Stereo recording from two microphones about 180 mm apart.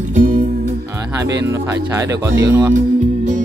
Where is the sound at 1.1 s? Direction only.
15° right (ahead or behind).